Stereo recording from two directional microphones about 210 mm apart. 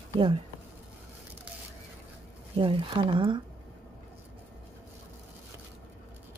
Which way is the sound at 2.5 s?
25° right (ahead or behind).